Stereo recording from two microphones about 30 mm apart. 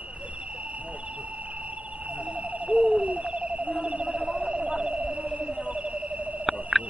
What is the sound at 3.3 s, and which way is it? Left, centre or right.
Cricket, right.